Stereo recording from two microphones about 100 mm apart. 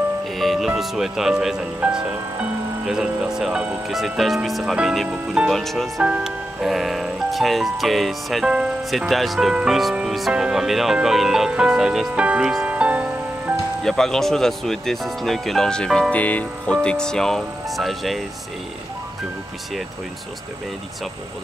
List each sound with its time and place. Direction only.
0.4 s music: centre (ahead or behind)
0.7 s speech: 5° right (ahead or behind)
5.5 s speech: centre (ahead or behind)
6.0 s speech: 10° right (ahead or behind)
13.8 s speech: 5° left (ahead or behind)
16.2 s music: 15° left (ahead or behind)
16.7 s speech: 10° left (ahead or behind)